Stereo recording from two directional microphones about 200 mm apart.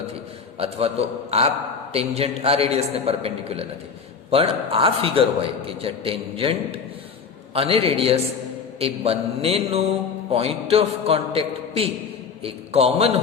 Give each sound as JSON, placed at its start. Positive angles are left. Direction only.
{"t": 0.6, "sound": "a man's voice", "side_deg": -30}